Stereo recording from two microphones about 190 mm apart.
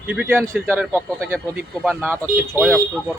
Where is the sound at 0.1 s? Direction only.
10° right (ahead or behind).